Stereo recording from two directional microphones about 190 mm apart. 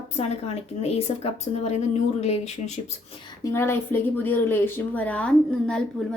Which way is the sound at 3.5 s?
15° left (ahead or behind).